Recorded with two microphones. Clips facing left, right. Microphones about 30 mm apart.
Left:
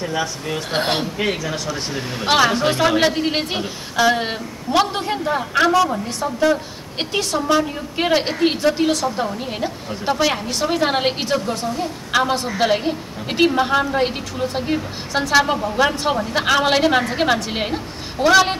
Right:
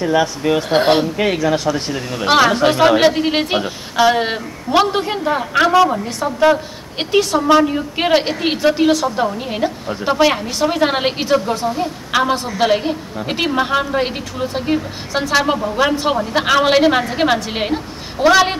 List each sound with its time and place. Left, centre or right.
0.0 s speech: right
0.6 s a woman's voice: centre; by 6.6 s right
7.0 s a woman's voice: centre
11.4 s a woman's voice: centre